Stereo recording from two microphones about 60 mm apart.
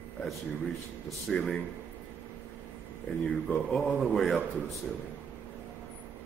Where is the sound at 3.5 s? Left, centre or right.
Left.